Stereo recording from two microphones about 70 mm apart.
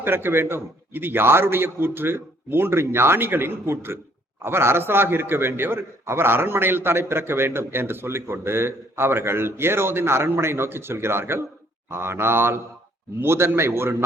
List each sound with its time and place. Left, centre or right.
0.0 s a man's voice: right